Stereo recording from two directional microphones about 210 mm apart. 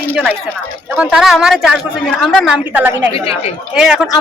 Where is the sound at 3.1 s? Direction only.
25° left (ahead or behind).